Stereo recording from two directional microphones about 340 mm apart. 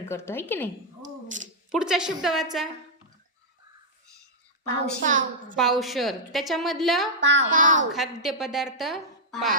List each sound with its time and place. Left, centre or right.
0.0 s speech: centre
1.0 s a sound: right
1.7 s a woman's voice: centre
4.8 s a woman's voice: right
5.8 s a woman's voice: centre
7.2 s a woman's voice: right
7.9 s a woman's voice: centre